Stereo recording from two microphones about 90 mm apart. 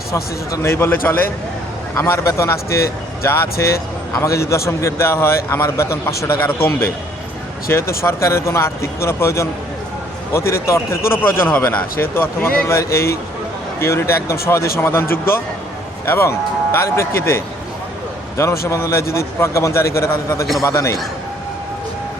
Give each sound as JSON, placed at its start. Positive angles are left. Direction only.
{"t": 0.1, "sound": "speech", "side_deg": 35}
{"t": 4.1, "sound": "a man's voice", "side_deg": 35}
{"t": 11.9, "sound": "a man's voice", "side_deg": 25}